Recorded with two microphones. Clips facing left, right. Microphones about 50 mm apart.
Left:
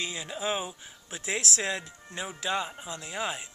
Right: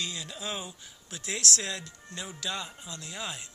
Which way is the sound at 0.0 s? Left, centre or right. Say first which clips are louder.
Left 4 dB; centre.